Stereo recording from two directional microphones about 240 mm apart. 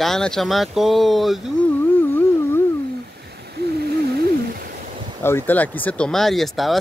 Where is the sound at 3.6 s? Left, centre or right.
Right.